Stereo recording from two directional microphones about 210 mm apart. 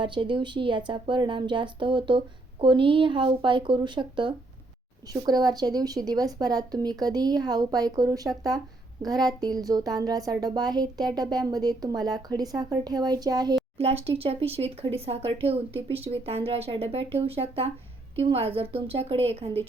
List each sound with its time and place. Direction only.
0.0 s speech: 20° right (ahead or behind)